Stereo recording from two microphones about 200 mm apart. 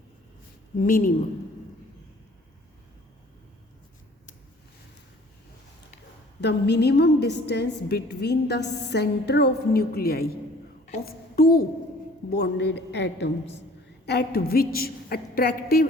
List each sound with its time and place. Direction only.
0.8 s a woman's voice: 45° left (ahead or behind)
6.4 s a woman's voice: 55° left (ahead or behind)